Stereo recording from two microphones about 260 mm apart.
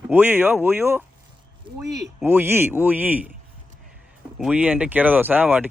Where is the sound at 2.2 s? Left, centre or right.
Centre.